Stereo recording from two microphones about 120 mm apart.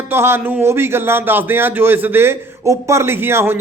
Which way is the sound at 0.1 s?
20° right (ahead or behind).